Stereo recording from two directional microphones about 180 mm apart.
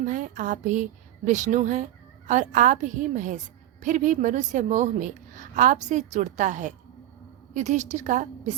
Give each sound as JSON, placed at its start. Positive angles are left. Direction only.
{"t": 0.0, "sound": "a woman's voice", "side_deg": -45}